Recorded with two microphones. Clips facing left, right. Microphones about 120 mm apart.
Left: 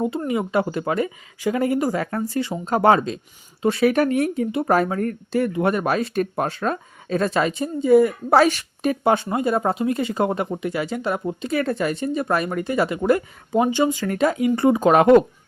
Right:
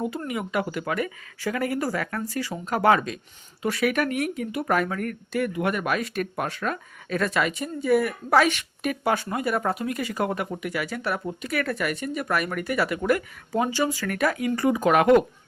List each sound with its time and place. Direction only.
0.0 s speech: 25° left (ahead or behind)
8.4 s speech: 35° left (ahead or behind)